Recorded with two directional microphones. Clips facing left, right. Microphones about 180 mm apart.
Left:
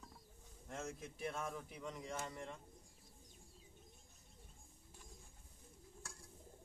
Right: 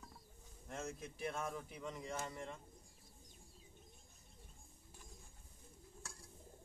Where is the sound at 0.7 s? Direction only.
Centre (ahead or behind).